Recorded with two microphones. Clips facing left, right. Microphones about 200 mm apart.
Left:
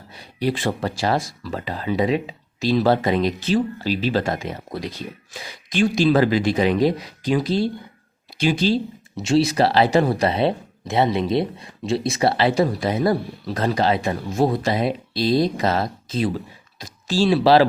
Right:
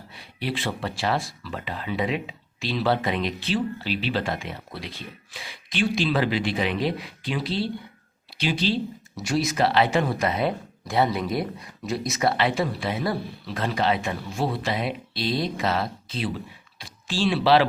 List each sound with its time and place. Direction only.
0.1 s speech: 40° left (ahead or behind)
9.2 s speech: 30° left (ahead or behind)